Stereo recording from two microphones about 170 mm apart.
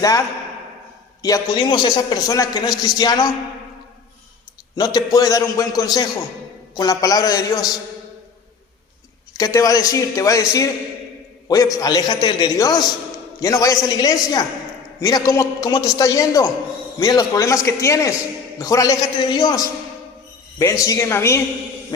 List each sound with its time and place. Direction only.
1.2 s a man's voice: 25° left (ahead or behind)
4.7 s a man's voice: 20° left (ahead or behind)
9.4 s a man's voice: 20° left (ahead or behind)